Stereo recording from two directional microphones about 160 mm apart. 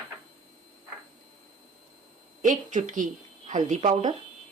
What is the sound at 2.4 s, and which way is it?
Speech, 50° right (ahead or behind).